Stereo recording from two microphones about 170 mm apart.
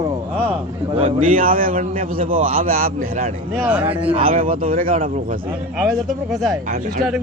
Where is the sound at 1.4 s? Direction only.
55° right (ahead or behind).